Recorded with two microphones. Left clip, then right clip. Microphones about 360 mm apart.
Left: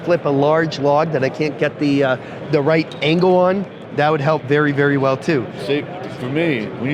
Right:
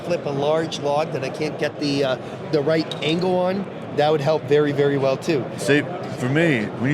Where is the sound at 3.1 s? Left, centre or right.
Left.